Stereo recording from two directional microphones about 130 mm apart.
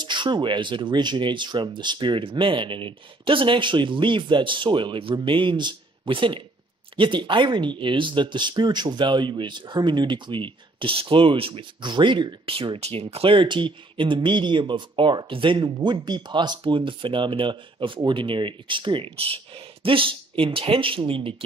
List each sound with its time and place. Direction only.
0.0 s speech: 35° right (ahead or behind)